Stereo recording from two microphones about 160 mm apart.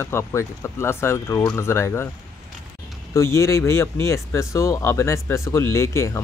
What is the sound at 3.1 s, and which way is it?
Speech, 20° left (ahead or behind).